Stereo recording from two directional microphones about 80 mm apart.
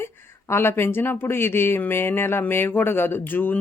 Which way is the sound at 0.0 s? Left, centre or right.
Left.